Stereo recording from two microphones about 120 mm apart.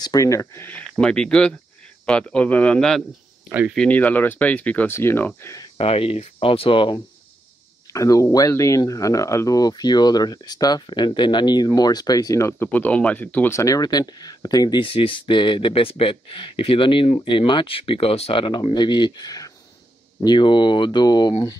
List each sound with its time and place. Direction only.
0.0 s speech: 30° left (ahead or behind)
5.8 s speech: 55° left (ahead or behind)
7.9 s speech: 25° left (ahead or behind)
13.6 s speech: 30° left (ahead or behind)